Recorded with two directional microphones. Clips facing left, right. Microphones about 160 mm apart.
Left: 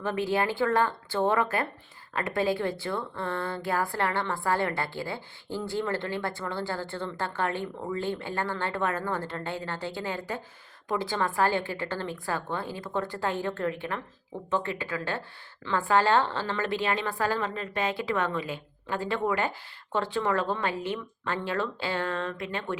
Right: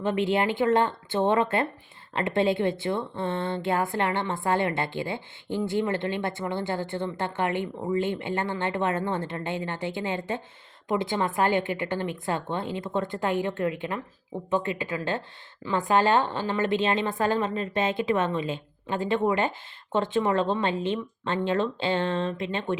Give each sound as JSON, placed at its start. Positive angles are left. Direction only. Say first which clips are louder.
{"t": 0.0, "sound": "a woman's voice", "louder": "right 3 dB", "side_deg": -20}